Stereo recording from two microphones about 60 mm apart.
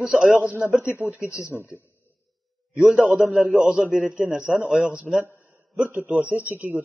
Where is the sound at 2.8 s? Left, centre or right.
Centre.